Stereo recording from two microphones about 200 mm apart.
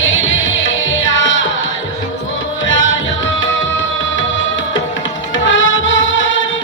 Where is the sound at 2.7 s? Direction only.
75° left (ahead or behind).